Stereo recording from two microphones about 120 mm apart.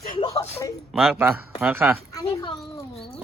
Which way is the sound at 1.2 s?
15° right (ahead or behind).